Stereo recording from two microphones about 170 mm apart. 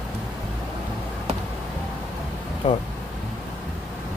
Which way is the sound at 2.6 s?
40° left (ahead or behind).